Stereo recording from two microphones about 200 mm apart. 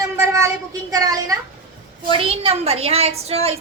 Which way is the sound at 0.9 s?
15° right (ahead or behind).